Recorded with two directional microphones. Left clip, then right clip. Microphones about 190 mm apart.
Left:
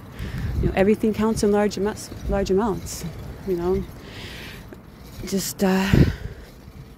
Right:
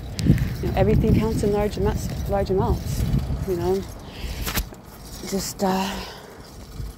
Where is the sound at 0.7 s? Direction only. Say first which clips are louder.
Left 1 dB; 40° left (ahead or behind).